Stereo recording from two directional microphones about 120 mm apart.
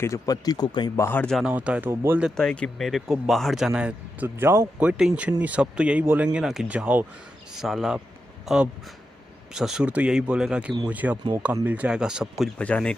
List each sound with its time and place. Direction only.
0.0 s speech: 25° left (ahead or behind)
0.9 s speech: 20° left (ahead or behind)
1.2 s speech: centre (ahead or behind)
1.5 s speech: 10° right (ahead or behind)
2.3 s speech: 5° left (ahead or behind); by 4.3 s 10° right (ahead or behind)
4.4 s speech: 20° right (ahead or behind)
12.5 s speech: 10° left (ahead or behind)